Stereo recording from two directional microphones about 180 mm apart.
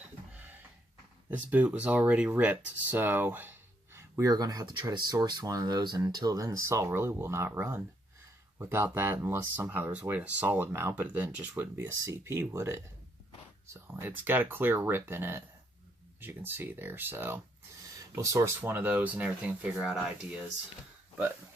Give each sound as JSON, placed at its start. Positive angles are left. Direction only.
{"t": 0.3, "sound": "a sound", "side_deg": -10}
{"t": 1.3, "sound": "speech", "side_deg": -10}
{"t": 13.8, "sound": "speech", "side_deg": -10}